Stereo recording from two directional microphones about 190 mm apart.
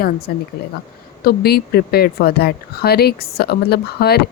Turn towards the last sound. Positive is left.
turn(degrees=55)  # may be behind; listen again after turning